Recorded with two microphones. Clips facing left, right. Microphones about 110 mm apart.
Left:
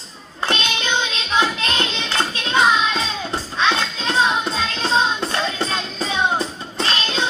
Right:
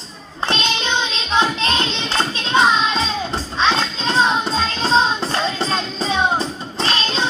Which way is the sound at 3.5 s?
30° right (ahead or behind).